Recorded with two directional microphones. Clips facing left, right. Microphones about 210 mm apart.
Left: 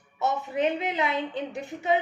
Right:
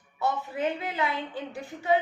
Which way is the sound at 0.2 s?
20° left (ahead or behind).